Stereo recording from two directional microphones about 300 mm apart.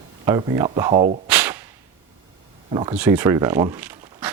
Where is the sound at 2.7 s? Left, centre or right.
Centre.